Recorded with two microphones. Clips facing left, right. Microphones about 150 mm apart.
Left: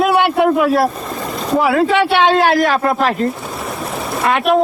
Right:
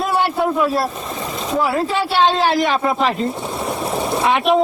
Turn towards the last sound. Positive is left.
turn(degrees=0)  # may be behind; listen again after turning